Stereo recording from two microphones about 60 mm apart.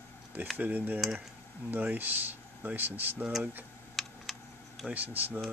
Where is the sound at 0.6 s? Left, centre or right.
Right.